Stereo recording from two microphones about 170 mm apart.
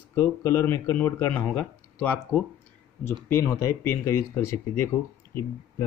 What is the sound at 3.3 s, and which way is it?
Speech, 15° left (ahead or behind).